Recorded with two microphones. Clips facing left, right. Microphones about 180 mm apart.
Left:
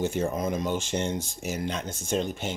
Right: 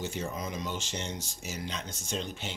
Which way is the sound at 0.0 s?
50° left (ahead or behind).